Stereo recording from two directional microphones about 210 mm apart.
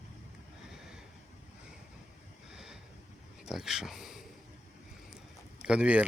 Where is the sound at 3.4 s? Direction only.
Centre (ahead or behind).